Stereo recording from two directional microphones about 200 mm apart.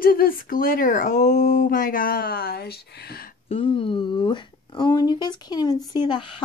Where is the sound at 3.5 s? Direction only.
25° left (ahead or behind).